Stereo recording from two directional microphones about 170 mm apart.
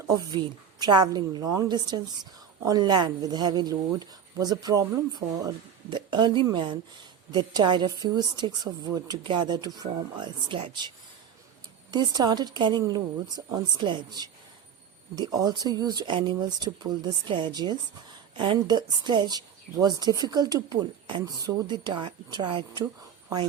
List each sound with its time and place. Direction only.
0.1 s a woman's voice: 25° right (ahead or behind)